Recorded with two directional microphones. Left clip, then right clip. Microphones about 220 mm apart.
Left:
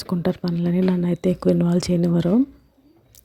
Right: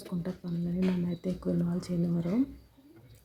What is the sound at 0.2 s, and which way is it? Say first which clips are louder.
Speech: left 15 dB; 40° left (ahead or behind).